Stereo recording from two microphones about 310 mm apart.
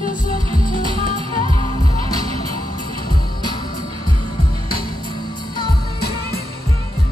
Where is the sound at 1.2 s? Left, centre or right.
Centre.